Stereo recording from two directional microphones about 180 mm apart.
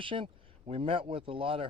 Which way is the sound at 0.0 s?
30° right (ahead or behind).